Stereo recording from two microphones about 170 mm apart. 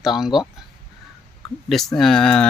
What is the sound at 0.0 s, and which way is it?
Speech, centre (ahead or behind).